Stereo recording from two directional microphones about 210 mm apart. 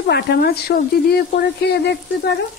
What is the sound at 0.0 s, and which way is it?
Speech, 50° left (ahead or behind).